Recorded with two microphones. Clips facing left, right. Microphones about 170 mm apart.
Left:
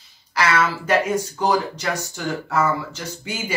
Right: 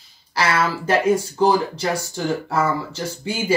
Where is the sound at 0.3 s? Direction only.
30° right (ahead or behind).